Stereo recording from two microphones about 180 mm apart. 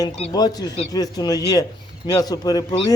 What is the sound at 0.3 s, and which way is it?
Speech, 20° left (ahead or behind).